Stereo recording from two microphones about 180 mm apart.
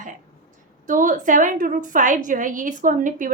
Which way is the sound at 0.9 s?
45° right (ahead or behind).